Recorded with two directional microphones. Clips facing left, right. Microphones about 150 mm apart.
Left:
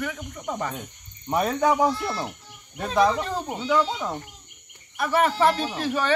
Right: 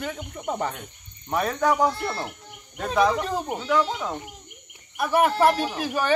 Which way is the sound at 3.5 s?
Centre (ahead or behind).